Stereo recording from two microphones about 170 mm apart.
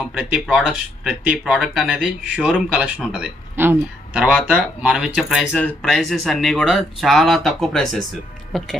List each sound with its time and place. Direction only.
0.0 s speech: 5° right (ahead or behind)
5.5 s speech: 10° left (ahead or behind)